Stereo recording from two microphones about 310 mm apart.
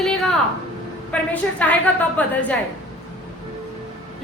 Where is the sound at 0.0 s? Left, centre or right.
Centre.